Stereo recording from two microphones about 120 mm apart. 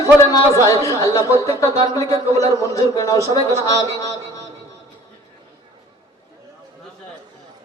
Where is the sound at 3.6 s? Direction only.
30° left (ahead or behind).